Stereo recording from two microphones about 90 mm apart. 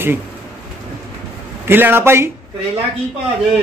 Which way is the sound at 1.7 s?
25° right (ahead or behind).